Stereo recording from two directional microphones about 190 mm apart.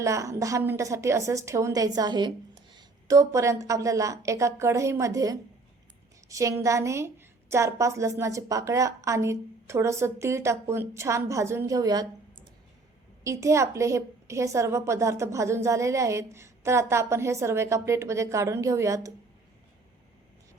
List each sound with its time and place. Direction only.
0.0 s a woman's voice: 15° right (ahead or behind)
13.2 s a woman's voice: 15° right (ahead or behind)